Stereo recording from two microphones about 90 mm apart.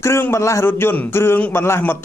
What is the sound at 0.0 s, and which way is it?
A man's voice, 30° left (ahead or behind).